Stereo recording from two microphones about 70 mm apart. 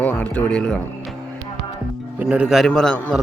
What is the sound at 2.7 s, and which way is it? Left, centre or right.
Speech, centre.